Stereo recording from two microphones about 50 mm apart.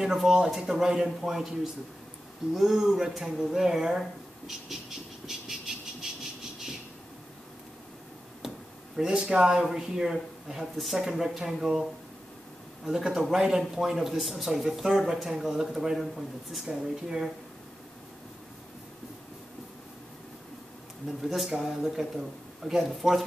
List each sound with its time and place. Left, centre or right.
0.0 s speech: centre
5.2 s frog: centre
8.9 s speech: centre
21.2 s speech: centre